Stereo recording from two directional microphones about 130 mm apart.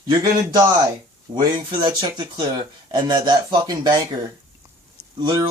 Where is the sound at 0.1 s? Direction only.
30° right (ahead or behind).